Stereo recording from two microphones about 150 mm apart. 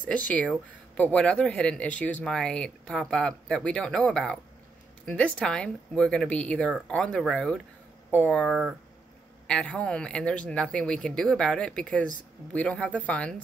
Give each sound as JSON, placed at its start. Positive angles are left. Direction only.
{"t": 0.9, "sound": "speech", "side_deg": 10}